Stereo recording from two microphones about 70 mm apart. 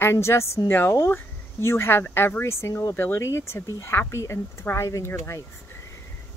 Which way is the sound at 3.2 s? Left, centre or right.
Left.